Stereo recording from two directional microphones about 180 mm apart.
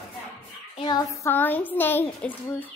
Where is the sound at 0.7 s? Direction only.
25° left (ahead or behind).